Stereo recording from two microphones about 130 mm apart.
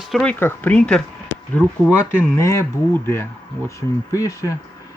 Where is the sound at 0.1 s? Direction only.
5° left (ahead or behind).